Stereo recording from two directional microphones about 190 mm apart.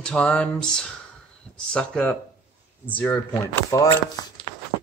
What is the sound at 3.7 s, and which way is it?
Speech, 20° left (ahead or behind).